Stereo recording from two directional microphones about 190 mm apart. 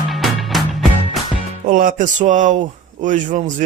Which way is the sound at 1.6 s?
45° right (ahead or behind).